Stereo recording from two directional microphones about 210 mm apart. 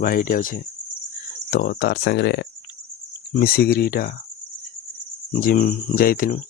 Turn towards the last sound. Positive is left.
turn(degrees=40)  # may be behind; listen again after turning